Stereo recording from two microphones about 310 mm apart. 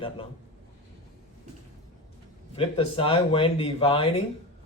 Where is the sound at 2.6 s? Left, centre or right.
Centre.